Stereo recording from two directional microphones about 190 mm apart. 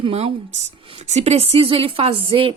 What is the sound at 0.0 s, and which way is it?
Speech, 30° right (ahead or behind).